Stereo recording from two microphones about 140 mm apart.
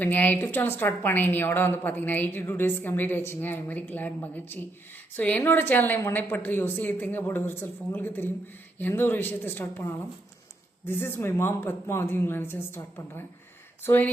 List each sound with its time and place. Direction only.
0.0 s a woman's voice: 10° left (ahead or behind)